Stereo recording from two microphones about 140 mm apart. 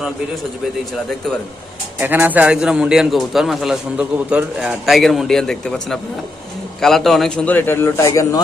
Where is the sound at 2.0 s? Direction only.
15° right (ahead or behind).